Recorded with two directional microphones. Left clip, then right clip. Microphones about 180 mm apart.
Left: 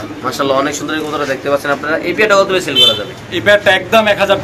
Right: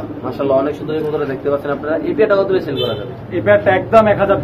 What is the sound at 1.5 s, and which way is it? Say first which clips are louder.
Speech: left 3 dB; 30° left (ahead or behind).